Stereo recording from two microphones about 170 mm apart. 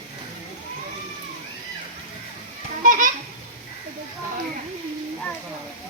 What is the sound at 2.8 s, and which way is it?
Children playing, 50° right (ahead or behind).